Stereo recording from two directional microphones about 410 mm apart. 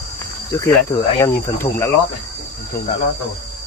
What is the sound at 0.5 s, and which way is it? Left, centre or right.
Speech, centre.